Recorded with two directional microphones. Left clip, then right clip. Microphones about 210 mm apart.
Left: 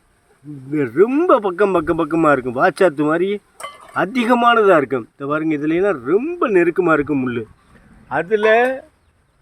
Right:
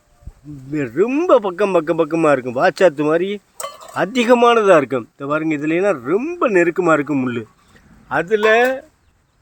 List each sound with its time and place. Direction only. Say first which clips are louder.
0.7 s speech: left 3 dB; centre (ahead or behind)
3.6 s a sound: right 3 dB; 45° right (ahead or behind)
3.9 s speech: right 2 dB; 5° right (ahead or behind)